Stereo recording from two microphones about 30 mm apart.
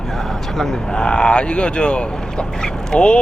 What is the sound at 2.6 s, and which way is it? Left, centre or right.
Speech, left.